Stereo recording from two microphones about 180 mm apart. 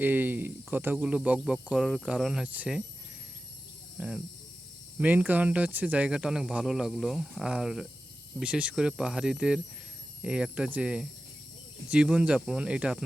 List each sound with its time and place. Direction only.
0.0 s speech: 10° right (ahead or behind)
3.9 s speech: 5° right (ahead or behind)